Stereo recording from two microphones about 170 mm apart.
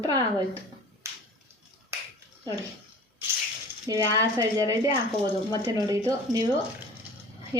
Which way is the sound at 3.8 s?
20° right (ahead or behind).